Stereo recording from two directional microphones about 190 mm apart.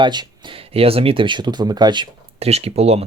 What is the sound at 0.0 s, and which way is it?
Speech, 25° right (ahead or behind).